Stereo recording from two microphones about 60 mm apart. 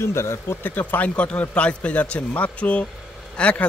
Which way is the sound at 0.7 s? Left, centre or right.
Left.